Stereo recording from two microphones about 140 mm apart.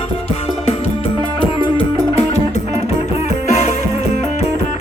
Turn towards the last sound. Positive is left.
turn(degrees=55)  # may be behind; listen again after turning